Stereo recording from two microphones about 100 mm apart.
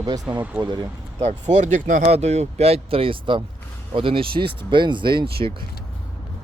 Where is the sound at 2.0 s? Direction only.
90° right; by 5.5 s 60° right (ahead or behind).